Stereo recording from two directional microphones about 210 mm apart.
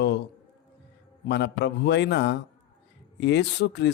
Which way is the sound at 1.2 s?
55° left (ahead or behind).